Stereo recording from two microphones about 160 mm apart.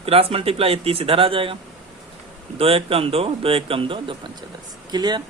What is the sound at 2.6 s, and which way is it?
Speech, 35° right (ahead or behind).